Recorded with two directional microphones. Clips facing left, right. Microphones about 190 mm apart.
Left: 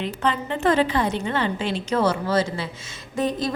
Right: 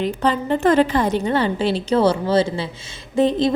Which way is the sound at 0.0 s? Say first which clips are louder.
Right 5 dB; 40° right (ahead or behind).